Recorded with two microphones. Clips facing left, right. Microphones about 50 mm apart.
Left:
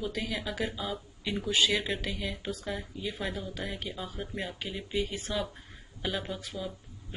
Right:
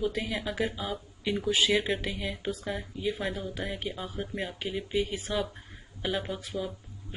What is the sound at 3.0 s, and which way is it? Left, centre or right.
Speech, centre.